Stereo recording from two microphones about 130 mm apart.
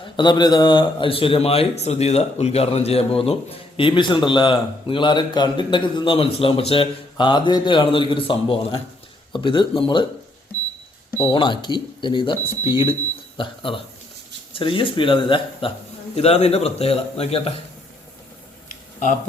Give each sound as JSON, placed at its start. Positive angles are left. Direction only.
{"t": 0.2, "sound": "a man's voice", "side_deg": 35}
{"t": 11.2, "sound": "speech", "side_deg": 35}
{"t": 16.1, "sound": "a man's voice", "side_deg": 50}
{"t": 18.7, "sound": "a sound", "side_deg": 70}